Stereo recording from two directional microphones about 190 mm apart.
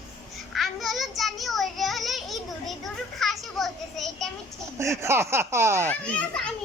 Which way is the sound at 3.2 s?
Centre (ahead or behind).